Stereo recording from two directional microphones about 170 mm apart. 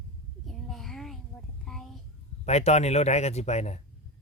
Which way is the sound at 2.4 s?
40° left (ahead or behind).